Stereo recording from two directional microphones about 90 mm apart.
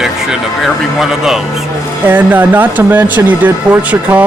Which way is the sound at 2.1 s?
20° right (ahead or behind).